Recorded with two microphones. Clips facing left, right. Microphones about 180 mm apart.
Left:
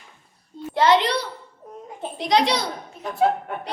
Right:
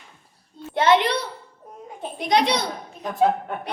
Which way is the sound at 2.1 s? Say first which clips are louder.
Even; 55° right (ahead or behind).